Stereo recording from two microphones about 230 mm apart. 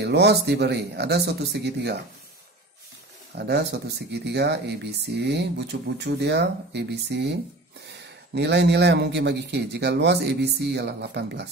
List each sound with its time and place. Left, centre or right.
0.0 s speech: right
3.3 s speech: right